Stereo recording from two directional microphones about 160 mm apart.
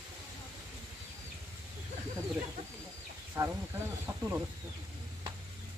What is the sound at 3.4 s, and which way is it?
Speech, 15° right (ahead or behind).